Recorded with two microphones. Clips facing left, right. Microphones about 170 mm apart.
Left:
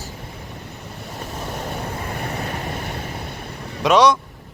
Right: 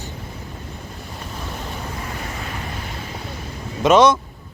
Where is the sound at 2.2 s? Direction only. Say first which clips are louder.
Left 3 dB; 45° left (ahead or behind).